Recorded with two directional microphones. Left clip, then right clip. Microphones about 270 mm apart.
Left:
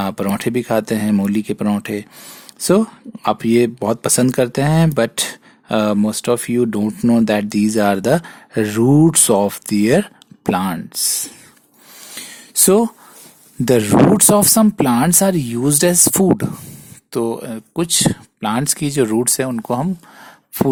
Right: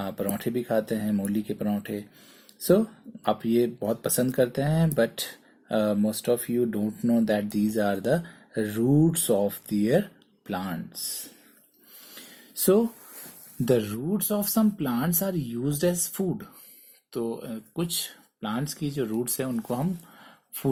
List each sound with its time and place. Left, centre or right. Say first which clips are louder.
0.0 s speech: left 10 dB; left
3.2 s speech: left 9 dB; left
13.7 s speech: left 13 dB; left